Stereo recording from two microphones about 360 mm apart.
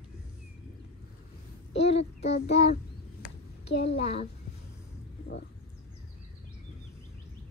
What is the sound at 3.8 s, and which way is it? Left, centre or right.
Child singing, centre.